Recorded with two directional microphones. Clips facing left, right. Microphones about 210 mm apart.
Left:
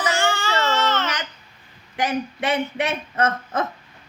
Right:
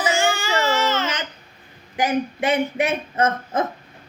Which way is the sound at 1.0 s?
25° right (ahead or behind).